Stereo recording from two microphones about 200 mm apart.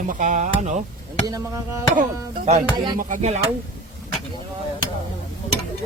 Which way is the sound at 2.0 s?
35° right (ahead or behind).